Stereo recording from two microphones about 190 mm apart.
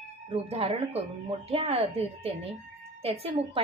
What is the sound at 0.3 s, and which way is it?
A woman's voice, 30° right (ahead or behind).